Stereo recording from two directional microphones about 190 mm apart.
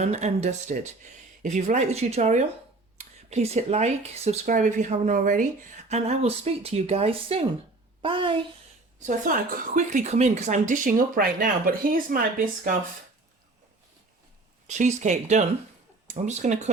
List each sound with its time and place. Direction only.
0.0 s a woman's voice: 35° right (ahead or behind)
9.0 s a woman's voice: 45° right (ahead or behind)
14.7 s speech: 40° right (ahead or behind)